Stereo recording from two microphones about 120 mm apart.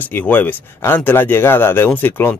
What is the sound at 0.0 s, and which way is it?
Speech, 15° left (ahead or behind).